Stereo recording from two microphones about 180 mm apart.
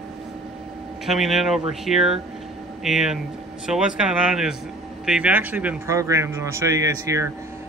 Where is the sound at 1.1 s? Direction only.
Centre (ahead or behind).